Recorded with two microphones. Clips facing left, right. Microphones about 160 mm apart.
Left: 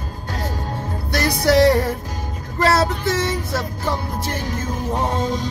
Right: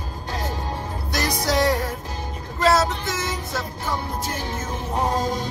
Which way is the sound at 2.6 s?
65° left (ahead or behind).